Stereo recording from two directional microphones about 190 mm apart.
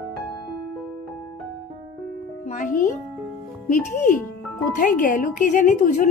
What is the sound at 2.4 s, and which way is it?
A woman's voice, 40° left (ahead or behind).